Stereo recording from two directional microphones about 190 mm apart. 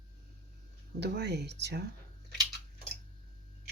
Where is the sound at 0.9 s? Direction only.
60° right (ahead or behind).